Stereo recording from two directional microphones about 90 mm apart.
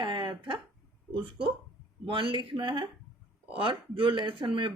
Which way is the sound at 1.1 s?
70° right (ahead or behind).